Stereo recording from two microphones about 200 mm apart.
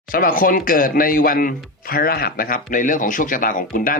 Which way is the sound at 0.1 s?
45° left (ahead or behind).